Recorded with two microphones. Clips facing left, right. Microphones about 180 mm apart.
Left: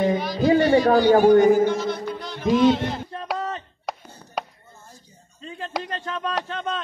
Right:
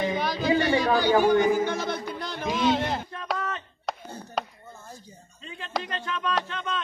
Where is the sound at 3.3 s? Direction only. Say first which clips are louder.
Left 3 dB; 35° left (ahead or behind).